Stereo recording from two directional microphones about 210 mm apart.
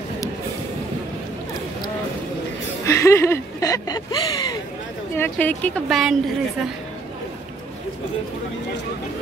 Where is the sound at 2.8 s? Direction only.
15° left (ahead or behind).